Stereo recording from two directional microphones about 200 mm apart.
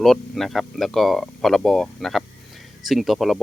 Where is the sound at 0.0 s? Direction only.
Centre (ahead or behind).